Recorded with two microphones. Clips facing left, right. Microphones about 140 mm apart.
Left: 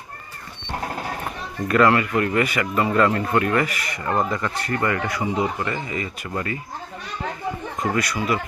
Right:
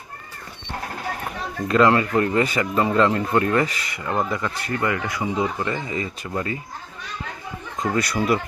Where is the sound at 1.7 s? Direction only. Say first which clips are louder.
Even; 25° right (ahead or behind).